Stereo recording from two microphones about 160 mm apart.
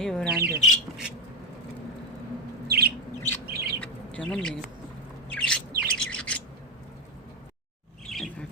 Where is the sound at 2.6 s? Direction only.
80° right.